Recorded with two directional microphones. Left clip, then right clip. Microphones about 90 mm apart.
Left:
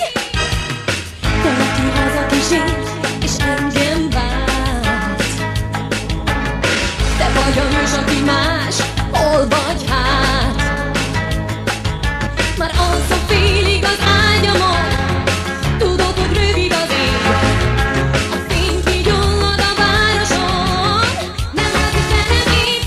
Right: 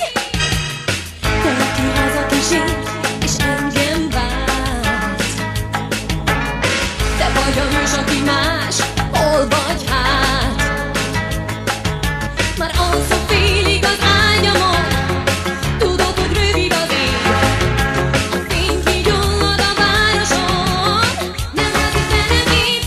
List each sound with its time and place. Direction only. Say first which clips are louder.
1.4 s music: left 2 dB; 25° left (ahead or behind)
6.2 s music: right 1 dB; 30° left (ahead or behind)
12.4 s music: left 1 dB; 25° left (ahead or behind)